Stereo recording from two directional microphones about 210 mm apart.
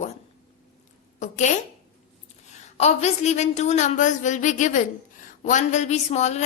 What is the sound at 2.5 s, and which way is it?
A woman's voice, 30° left (ahead or behind).